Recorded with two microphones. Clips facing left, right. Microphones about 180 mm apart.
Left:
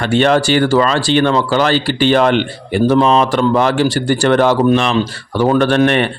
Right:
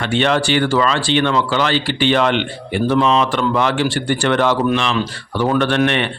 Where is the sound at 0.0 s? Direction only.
40° left (ahead or behind).